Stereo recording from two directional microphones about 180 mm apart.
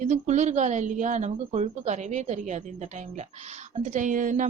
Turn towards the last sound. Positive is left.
turn(degrees=-45)  # may be behind; listen again after turning